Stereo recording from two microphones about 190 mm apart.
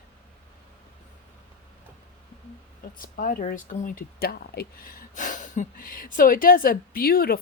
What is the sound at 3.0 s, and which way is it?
Speech, 45° left (ahead or behind).